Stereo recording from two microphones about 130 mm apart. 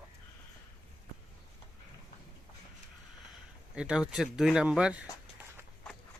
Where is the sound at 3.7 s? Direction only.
5° right (ahead or behind).